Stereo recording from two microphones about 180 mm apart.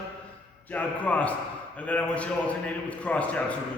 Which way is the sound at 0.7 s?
10° left (ahead or behind).